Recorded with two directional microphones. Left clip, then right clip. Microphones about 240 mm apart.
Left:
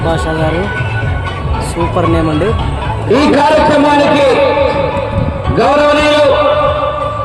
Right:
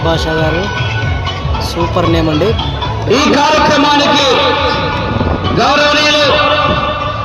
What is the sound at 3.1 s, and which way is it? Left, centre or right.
A man's voice, right.